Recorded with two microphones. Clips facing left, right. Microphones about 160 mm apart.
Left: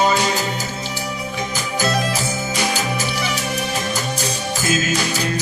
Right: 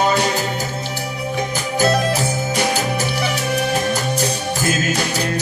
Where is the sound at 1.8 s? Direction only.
55° right (ahead or behind).